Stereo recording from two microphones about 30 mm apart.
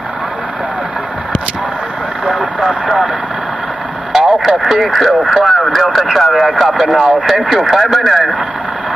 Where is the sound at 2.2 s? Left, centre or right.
Centre.